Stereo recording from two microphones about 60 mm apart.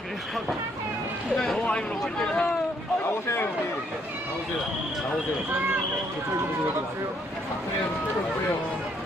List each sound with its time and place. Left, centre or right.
2.1 s speech: centre
3.0 s speech: left